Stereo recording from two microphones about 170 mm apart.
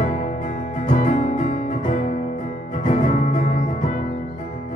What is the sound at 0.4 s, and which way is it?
Music, 50° left (ahead or behind).